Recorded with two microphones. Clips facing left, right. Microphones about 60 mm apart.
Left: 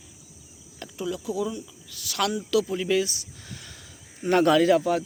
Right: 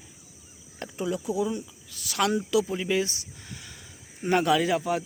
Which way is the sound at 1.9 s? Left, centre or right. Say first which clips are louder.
Right 1 dB; right.